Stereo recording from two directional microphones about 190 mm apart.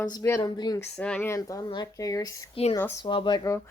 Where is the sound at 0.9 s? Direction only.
5° left (ahead or behind).